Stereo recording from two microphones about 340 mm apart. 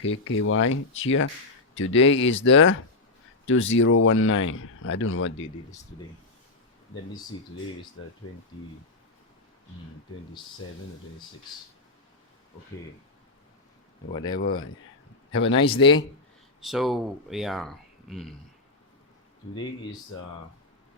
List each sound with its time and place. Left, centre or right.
0.1 s speech: left
14.4 s speech: left
15.6 s speech: centre
16.6 s speech: centre